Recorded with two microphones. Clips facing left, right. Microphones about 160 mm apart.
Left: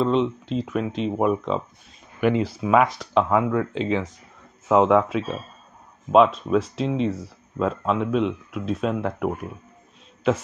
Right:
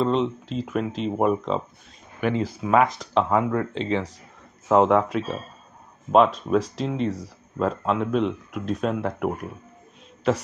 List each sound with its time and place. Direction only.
0.0 s speech: centre (ahead or behind)